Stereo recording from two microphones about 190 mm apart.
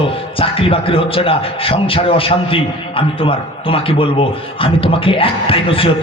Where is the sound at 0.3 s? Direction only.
30° left (ahead or behind).